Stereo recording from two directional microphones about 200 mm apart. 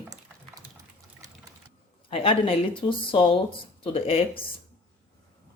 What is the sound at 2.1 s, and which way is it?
Speech, 30° left (ahead or behind).